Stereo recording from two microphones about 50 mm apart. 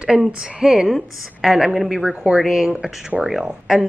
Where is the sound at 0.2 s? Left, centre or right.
Centre.